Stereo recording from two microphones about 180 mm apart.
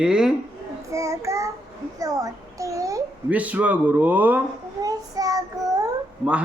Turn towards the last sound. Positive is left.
turn(degrees=-5)  # may be behind; listen again after turning